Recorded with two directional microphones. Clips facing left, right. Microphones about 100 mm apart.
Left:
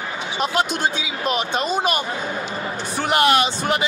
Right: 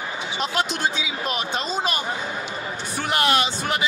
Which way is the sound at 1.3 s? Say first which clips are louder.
Left 5 dB; 20° left (ahead or behind).